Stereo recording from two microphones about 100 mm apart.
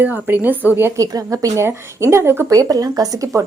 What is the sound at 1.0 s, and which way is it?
A woman's voice, 35° right (ahead or behind).